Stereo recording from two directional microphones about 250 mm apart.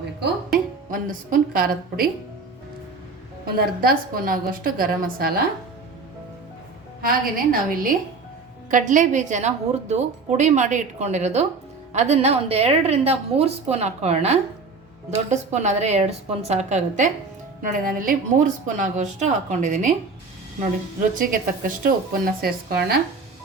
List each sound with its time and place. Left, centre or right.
0.9 s a woman's voice: right
3.4 s a woman's voice: right
7.0 s a woman's voice: right
21.2 s a woman's voice: right